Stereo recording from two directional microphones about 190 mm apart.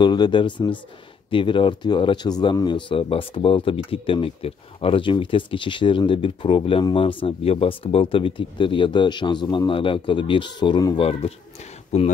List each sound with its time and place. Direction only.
0.0 s speech: 25° left (ahead or behind)